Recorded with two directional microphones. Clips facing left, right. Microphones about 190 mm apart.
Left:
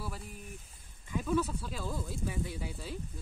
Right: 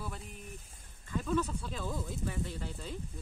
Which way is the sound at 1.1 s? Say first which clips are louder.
Left 1 dB; 10° left (ahead or behind).